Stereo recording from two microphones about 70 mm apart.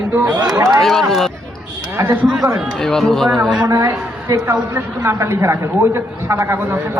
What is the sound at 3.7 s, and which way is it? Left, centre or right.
Speech, right.